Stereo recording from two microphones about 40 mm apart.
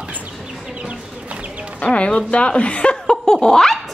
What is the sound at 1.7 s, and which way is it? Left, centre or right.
Speech, left.